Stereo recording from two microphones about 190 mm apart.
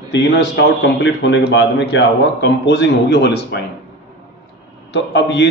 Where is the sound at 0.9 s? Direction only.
65° left (ahead or behind).